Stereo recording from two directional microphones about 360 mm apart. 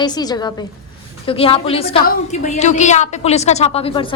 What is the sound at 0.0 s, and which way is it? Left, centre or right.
A woman's voice, centre.